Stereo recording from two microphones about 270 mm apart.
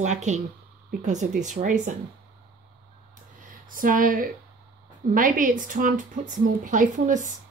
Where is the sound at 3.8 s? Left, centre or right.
Right.